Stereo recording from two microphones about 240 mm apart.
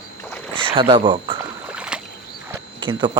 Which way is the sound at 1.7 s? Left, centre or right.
Centre.